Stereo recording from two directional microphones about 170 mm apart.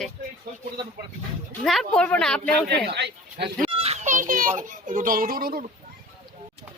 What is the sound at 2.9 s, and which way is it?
Speech, 90° right.